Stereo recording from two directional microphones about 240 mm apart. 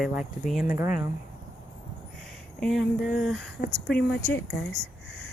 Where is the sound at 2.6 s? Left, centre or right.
Centre.